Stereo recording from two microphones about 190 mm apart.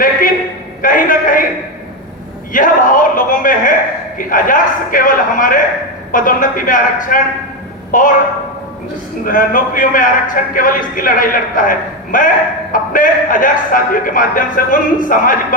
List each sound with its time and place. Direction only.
0.8 s a man's voice: 45° left (ahead or behind)
2.5 s a man's voice: 45° left (ahead or behind)
9.2 s a man's voice: 45° left (ahead or behind)